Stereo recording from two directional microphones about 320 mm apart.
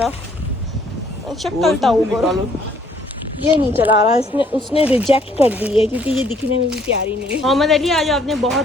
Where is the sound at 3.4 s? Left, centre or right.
Centre.